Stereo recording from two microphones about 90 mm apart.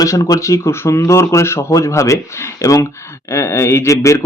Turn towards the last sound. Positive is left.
turn(degrees=35)  # may be behind; listen again after turning